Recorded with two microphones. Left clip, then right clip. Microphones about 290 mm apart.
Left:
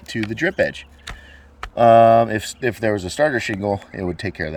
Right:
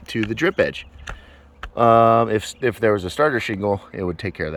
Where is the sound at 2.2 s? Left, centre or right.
Centre.